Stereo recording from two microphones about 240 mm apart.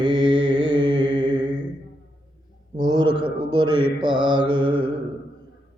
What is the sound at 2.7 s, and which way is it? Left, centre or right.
Mantra, centre.